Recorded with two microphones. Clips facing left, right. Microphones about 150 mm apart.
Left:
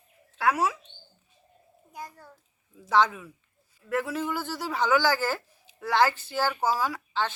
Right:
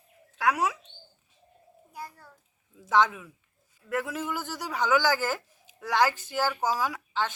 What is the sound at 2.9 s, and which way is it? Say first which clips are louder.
A woman's voice: left 1 dB; 15° right (ahead or behind).